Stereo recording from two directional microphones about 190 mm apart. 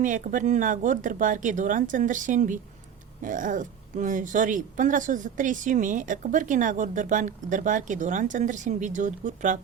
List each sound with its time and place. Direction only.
0.0 s speech: 45° right (ahead or behind)